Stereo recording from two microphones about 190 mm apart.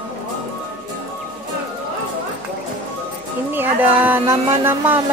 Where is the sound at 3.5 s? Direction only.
10° right (ahead or behind).